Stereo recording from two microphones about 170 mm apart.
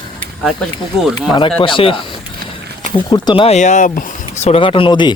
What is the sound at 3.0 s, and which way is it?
Speech, 25° left (ahead or behind).